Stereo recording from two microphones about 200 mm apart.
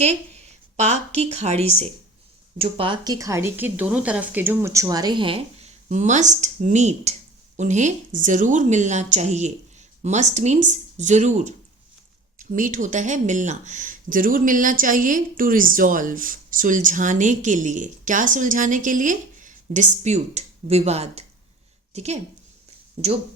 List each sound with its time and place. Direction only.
0.8 s speech: 35° right (ahead or behind)